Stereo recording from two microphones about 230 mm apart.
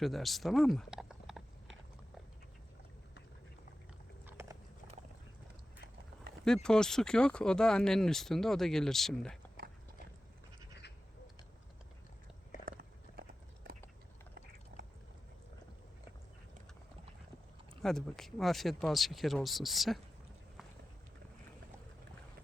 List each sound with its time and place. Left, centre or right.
0.0 s speech: centre
4.3 s a sound: centre
6.4 s speech: centre
12.6 s biting: right
17.8 s speech: centre